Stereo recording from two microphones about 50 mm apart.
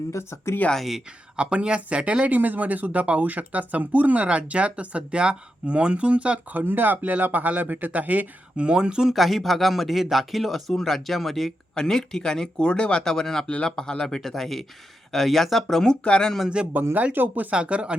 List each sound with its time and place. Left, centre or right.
0.1 s speech: left
1.4 s speech: right
6.5 s speech: right
8.5 s speech: centre
9.1 s speech: centre
15.6 s speech: centre
16.6 s speech: centre
16.9 s speech: right
17.5 s speech: right